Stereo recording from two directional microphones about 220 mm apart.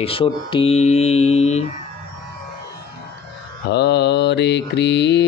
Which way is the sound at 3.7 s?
50° left (ahead or behind).